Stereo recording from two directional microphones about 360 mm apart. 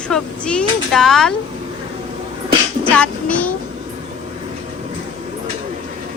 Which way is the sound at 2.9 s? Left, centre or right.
Centre.